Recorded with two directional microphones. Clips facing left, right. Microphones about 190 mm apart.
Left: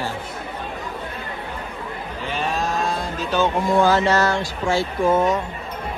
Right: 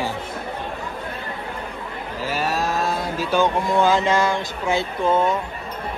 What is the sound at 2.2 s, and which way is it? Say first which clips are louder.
Cattle: right 1 dB; 5° right (ahead or behind).